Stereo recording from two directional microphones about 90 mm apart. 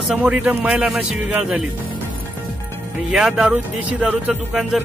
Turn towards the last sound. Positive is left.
turn(degrees=-5)  # may be behind; listen again after turning